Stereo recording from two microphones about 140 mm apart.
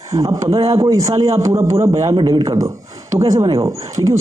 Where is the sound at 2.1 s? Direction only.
35° right (ahead or behind).